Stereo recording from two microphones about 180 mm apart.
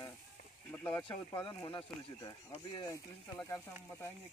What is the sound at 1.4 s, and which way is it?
Speech, 25° left (ahead or behind).